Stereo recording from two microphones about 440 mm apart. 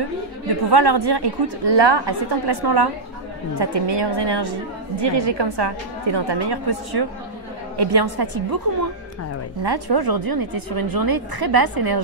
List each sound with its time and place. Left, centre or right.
0.7 s a woman's voice: right
9.6 s speech: right